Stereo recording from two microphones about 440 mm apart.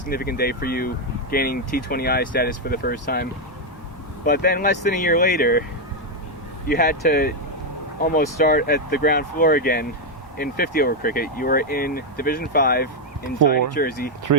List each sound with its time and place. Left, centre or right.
0.1 s speech: left
4.3 s speech: left
6.7 s speech: centre
14.3 s speech: right